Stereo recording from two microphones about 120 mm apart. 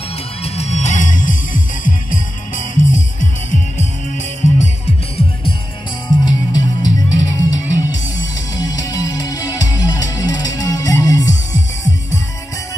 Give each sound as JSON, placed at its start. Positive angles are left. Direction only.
{"t": 0.4, "sound": "music", "side_deg": 65}
{"t": 6.2, "sound": "music", "side_deg": 35}